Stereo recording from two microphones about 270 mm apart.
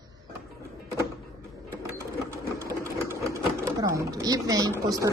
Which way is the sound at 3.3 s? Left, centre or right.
Centre.